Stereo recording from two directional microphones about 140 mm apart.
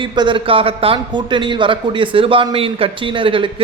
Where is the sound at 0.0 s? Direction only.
35° right (ahead or behind).